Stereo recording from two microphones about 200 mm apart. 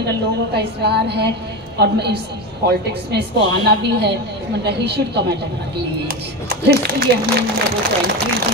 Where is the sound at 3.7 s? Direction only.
55° right (ahead or behind).